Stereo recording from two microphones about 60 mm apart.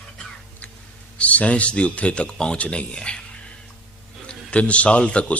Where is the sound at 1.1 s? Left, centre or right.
Left.